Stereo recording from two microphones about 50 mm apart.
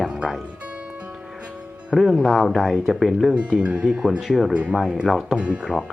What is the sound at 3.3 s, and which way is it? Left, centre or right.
Speech, right.